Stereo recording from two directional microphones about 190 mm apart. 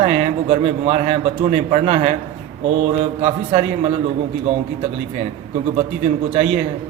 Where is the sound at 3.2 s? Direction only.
35° right (ahead or behind).